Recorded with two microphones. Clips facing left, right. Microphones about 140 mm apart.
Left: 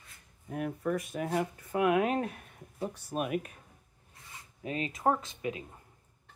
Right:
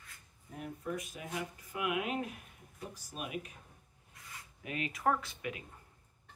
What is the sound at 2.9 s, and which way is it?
Speech, 60° left (ahead or behind).